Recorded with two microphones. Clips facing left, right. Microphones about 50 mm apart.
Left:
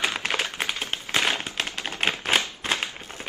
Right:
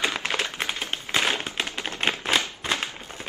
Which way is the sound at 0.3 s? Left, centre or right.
Centre.